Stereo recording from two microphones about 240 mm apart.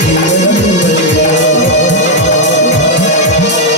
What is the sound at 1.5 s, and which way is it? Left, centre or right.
Music, left.